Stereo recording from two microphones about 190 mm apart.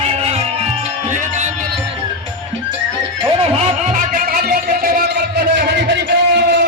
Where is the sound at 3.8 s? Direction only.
45° right (ahead or behind).